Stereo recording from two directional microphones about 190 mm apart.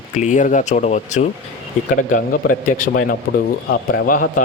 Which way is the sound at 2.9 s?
60° left (ahead or behind).